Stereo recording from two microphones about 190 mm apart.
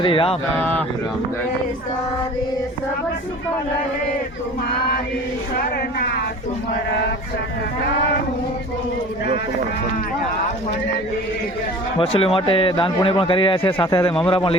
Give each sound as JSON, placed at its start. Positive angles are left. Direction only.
{"t": 0.0, "sound": "a man's voice", "side_deg": 30}
{"t": 0.5, "sound": "speech", "side_deg": 10}
{"t": 11.9, "sound": "a man's voice", "side_deg": 30}